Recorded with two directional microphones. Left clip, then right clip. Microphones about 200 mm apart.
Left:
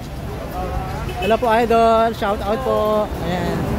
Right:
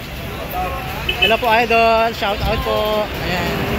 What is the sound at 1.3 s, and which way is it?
Speech, 30° left (ahead or behind).